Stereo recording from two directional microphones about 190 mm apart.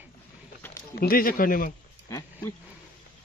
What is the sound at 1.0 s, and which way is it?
Speech, 50° left (ahead or behind).